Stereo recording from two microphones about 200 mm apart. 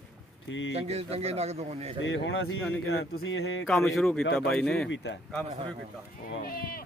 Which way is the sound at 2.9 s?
90° left.